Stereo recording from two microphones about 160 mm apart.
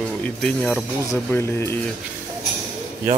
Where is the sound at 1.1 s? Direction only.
15° left (ahead or behind).